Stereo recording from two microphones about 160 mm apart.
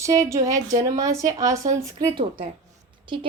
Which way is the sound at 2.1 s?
30° right (ahead or behind).